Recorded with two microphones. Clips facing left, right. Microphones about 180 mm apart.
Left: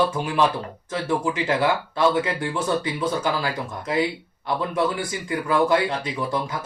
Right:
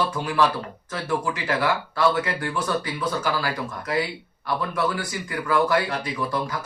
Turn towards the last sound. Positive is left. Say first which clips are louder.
# left 1 dB
turn(degrees=25)  # may be behind; listen again after turning